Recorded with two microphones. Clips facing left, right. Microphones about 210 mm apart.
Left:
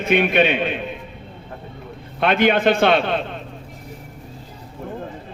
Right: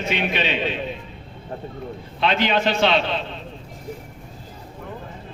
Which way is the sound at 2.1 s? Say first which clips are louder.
Left 4 dB; 55° left (ahead or behind).